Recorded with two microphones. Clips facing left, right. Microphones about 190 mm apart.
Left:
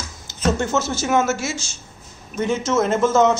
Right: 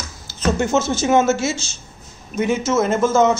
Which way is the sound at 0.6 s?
15° right (ahead or behind).